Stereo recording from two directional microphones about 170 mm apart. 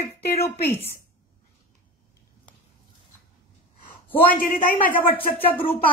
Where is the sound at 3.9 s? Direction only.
55° left (ahead or behind).